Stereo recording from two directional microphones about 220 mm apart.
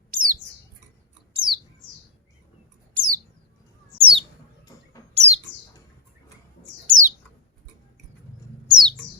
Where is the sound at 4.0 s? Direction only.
25° right (ahead or behind).